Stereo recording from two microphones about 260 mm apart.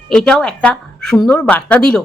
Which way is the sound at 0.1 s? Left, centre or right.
Centre.